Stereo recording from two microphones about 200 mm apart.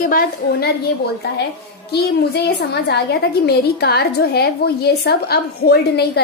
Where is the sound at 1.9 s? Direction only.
55° left (ahead or behind).